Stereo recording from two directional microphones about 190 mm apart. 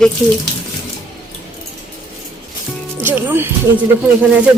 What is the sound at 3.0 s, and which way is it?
Speech, 10° right (ahead or behind).